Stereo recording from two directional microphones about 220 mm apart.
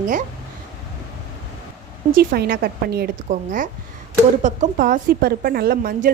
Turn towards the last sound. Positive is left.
turn(degrees=-40)  # may be behind; listen again after turning